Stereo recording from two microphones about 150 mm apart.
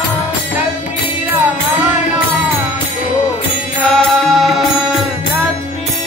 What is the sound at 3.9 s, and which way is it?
Music, centre (ahead or behind).